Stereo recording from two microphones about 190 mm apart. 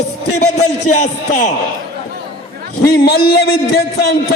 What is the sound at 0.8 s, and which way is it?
Speech, 40° left (ahead or behind).